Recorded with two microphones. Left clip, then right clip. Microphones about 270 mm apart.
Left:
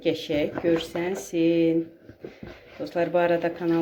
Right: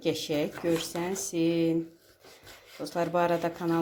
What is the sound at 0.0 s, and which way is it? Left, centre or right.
Speech, right.